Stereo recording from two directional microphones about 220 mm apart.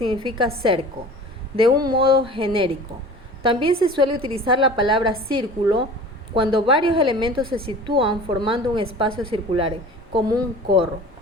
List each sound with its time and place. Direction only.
0.0 s a woman's voice: 25° right (ahead or behind)
1.8 s a woman's voice: 20° right (ahead or behind)